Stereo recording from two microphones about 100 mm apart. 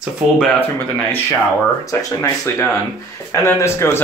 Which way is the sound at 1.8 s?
35° left (ahead or behind).